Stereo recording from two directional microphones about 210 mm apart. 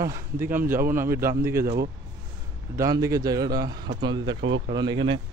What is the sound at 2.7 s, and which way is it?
Speech, 15° right (ahead or behind).